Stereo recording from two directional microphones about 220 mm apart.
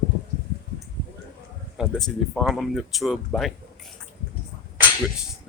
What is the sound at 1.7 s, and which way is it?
Speech, centre (ahead or behind).